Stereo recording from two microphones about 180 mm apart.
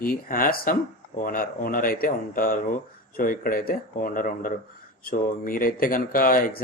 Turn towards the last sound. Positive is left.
turn(degrees=50)  # may be behind; listen again after turning